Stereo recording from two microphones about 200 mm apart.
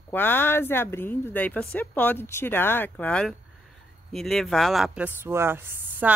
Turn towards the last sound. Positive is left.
turn(degrees=-10)  # may be behind; listen again after turning